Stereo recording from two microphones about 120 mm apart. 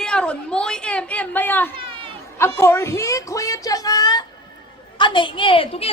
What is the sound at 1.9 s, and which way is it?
Chatter, 45° right (ahead or behind).